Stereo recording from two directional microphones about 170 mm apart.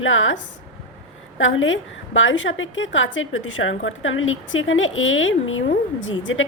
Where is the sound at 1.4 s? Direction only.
90° left.